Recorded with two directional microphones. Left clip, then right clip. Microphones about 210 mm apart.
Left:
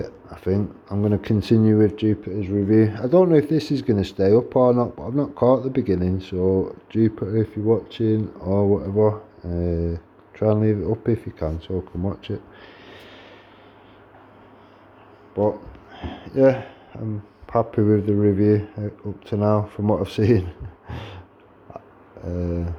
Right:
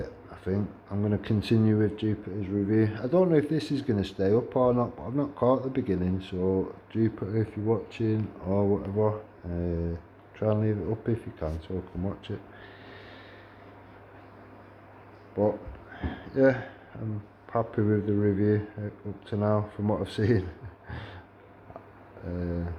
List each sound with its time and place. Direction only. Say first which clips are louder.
0.0 s speech: left 8 dB; 30° left (ahead or behind)
15.4 s a sound: left 5 dB; 30° left (ahead or behind)
16.3 s speech: left 6 dB; 30° left (ahead or behind)